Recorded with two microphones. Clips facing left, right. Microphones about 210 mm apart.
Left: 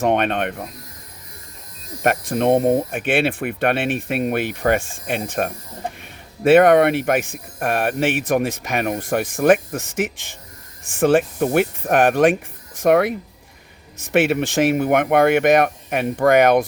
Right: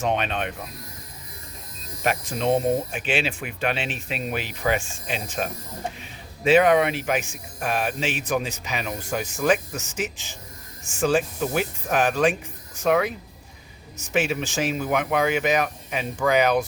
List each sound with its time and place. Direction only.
0.0 s speech: 60° left (ahead or behind)
2.0 s speech: 55° left (ahead or behind)